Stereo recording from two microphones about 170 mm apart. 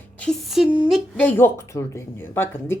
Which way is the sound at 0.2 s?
Centre (ahead or behind).